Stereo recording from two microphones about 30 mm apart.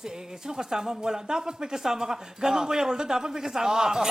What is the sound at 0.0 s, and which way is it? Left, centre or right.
Speech, centre.